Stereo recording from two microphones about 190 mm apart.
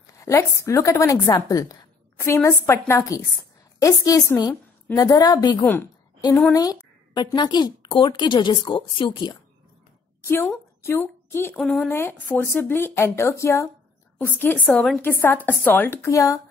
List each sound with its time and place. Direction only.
0.0 s a woman's voice: 15° left (ahead or behind)
10.8 s a woman's voice: 10° left (ahead or behind)
11.5 s a woman's voice: centre (ahead or behind); by 16.3 s 15° left (ahead or behind)